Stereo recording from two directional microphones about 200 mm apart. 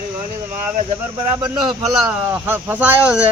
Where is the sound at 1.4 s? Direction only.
20° right (ahead or behind).